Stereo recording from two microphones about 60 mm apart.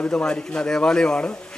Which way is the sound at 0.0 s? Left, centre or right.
Left.